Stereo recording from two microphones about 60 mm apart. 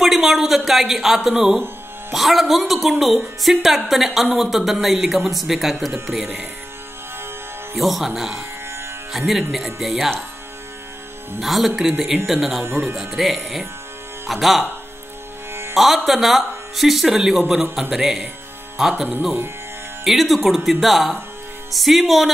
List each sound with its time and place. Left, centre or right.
0.0 s a woman's voice: centre
7.7 s a woman's voice: centre
8.4 s music: right
9.1 s a woman's voice: centre
11.4 s a woman's voice: centre
12.6 s speech: right
13.1 s a woman's voice: centre
15.7 s a woman's voice: centre
20.1 s a woman's voice: centre